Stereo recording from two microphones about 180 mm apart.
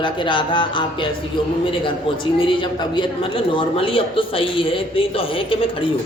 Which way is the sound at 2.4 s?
30° left (ahead or behind).